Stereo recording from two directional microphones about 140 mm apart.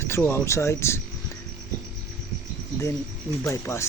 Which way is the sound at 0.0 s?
15° left (ahead or behind).